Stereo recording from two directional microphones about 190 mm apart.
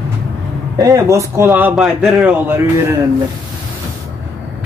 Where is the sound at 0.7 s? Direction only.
20° right (ahead or behind).